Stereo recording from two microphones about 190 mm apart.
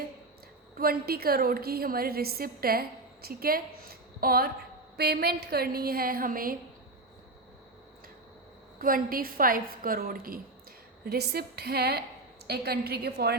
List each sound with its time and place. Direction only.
0.8 s a woman's voice: 50° right (ahead or behind)
8.8 s a woman's voice: 50° right (ahead or behind)